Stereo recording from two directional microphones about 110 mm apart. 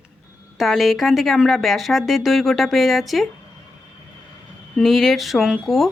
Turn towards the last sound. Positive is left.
turn(degrees=0)  # may be behind; listen again after turning